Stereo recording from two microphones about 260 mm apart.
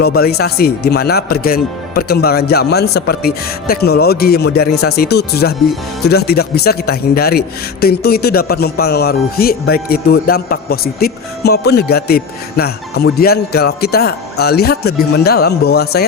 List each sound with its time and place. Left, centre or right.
0.0 s speech: left